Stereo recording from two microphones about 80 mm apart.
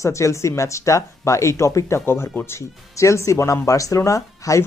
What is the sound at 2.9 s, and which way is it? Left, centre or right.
Speech, left.